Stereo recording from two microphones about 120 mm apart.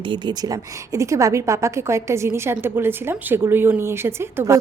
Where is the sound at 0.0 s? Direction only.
40° right (ahead or behind).